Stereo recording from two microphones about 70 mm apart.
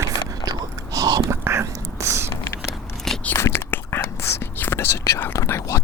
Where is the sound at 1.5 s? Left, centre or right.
Right.